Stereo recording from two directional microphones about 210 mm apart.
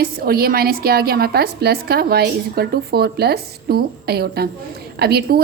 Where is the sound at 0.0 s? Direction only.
45° right (ahead or behind).